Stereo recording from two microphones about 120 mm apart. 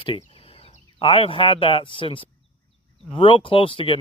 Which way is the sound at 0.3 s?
55° left (ahead or behind).